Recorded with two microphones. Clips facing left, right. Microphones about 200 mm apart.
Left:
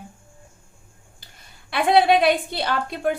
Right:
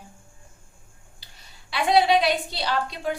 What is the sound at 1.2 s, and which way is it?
A woman's voice, 50° left (ahead or behind).